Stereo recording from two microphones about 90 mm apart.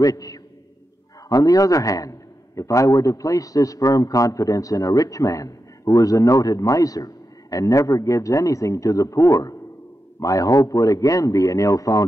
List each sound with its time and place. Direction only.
0.0 s a man's voice: 40° left (ahead or behind)